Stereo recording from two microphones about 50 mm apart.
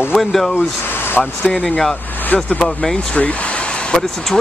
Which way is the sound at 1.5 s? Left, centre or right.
Left.